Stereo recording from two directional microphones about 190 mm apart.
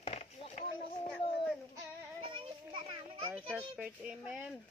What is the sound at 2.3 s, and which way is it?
Children playing, 25° right (ahead or behind).